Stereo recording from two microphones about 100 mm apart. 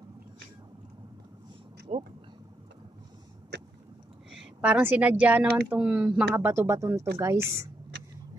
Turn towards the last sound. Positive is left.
turn(degrees=-25)  # may be behind; listen again after turning